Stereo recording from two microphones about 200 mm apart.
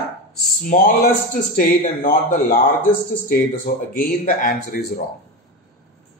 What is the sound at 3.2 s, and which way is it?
Speech, 45° left (ahead or behind).